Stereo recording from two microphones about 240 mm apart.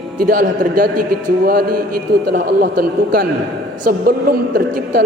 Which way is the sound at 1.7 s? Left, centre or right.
Right.